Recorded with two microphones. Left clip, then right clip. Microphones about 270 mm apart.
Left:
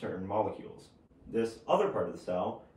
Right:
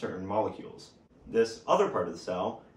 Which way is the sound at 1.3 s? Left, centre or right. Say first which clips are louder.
Right 5 dB; centre.